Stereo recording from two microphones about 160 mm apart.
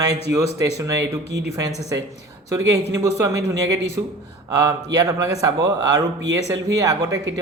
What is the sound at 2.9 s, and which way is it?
Speech, 20° right (ahead or behind).